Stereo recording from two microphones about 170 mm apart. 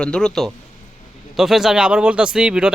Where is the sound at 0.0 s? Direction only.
5° left (ahead or behind).